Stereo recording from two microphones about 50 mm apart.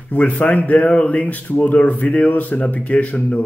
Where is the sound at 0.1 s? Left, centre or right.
Left.